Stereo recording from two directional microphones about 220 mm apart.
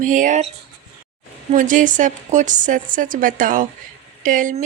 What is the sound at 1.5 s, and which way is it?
Speech, 35° right (ahead or behind).